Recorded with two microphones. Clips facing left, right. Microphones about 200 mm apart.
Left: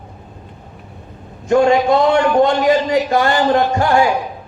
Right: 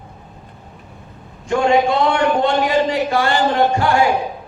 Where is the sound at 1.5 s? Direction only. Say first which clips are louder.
Left 3 dB; 40° left (ahead or behind).